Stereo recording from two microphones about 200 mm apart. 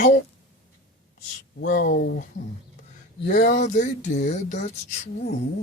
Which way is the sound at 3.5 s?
40° left (ahead or behind).